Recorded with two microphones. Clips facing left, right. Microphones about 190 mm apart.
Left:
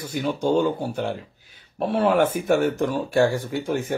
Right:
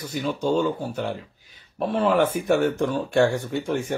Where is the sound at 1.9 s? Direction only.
10° left (ahead or behind).